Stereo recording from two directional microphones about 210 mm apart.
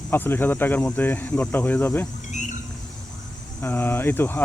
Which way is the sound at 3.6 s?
10° left (ahead or behind).